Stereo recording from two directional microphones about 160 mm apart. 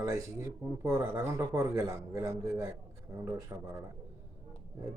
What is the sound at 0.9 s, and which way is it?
A man's voice, 20° right (ahead or behind).